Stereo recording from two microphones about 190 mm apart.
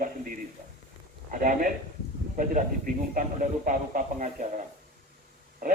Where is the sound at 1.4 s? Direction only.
45° right (ahead or behind).